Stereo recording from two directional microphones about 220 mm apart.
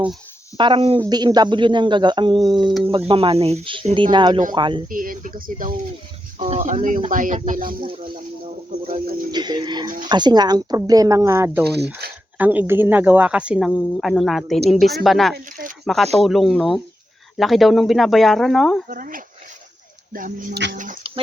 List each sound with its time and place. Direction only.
0.5 s speech: 20° right (ahead or behind)
4.9 s speech: 40° right (ahead or behind)
6.4 s speech: 30° right (ahead or behind)
7.9 s speech: 25° right (ahead or behind)
9.3 s speech: 20° right (ahead or behind)
11.6 s speech: 50° right (ahead or behind)
12.4 s speech: 10° right (ahead or behind)
18.9 s speech: 40° right (ahead or behind)